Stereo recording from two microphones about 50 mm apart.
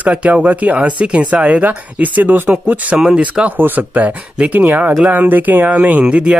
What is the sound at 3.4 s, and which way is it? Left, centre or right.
Speech, right.